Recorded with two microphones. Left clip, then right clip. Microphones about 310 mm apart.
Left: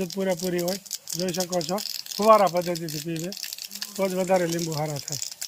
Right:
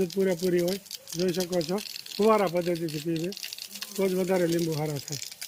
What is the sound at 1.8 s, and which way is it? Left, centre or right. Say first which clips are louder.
Speech: left 5 dB; centre.